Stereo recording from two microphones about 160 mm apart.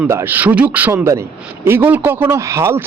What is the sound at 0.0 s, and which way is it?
A man's voice, 15° right (ahead or behind).